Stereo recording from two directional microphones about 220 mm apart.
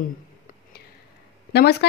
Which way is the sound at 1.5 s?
50° left (ahead or behind).